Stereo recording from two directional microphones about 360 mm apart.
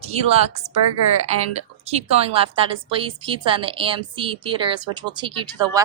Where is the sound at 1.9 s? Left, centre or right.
Centre.